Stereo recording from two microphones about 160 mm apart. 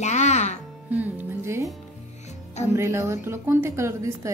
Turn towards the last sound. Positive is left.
turn(degrees=-15)  # may be behind; listen again after turning